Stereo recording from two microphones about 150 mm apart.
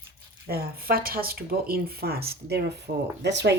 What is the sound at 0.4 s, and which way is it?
Speech, 90° right.